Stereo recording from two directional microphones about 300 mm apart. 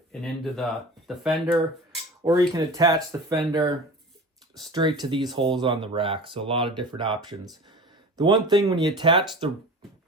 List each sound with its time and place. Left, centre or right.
0.1 s speech: centre
2.5 s speech: centre